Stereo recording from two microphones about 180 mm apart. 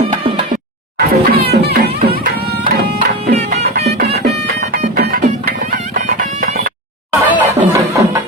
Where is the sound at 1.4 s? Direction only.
65° right (ahead or behind).